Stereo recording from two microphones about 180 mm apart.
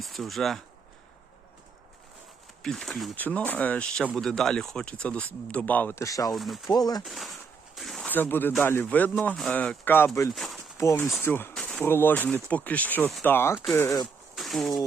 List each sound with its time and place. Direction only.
0.0 s speech: centre (ahead or behind)
2.6 s speech: 5° left (ahead or behind); by 6.3 s 20° left (ahead or behind)
6.3 s speech: centre (ahead or behind)
6.7 s speech: 20° left (ahead or behind)
7.0 s speech: centre (ahead or behind)
10.3 s speech: centre (ahead or behind)
10.8 s speech: 15° left (ahead or behind)
14.3 s a sound: centre (ahead or behind)